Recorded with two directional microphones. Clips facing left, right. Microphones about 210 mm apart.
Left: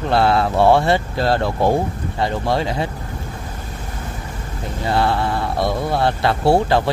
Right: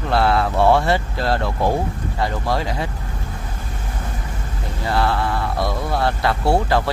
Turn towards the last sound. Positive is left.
turn(degrees=25)  # may be behind; listen again after turning